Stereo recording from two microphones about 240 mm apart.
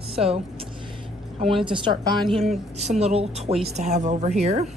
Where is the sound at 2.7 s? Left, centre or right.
Right.